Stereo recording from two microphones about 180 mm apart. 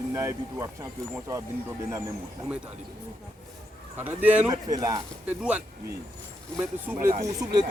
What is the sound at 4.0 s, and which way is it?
Speech, 10° right (ahead or behind).